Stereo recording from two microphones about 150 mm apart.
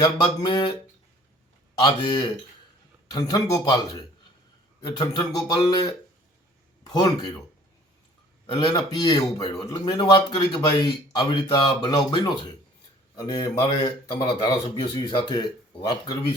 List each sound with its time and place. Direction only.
0.0 s speech: 30° left (ahead or behind)
1.8 s speech: 30° left (ahead or behind)
8.4 s speech: 25° left (ahead or behind)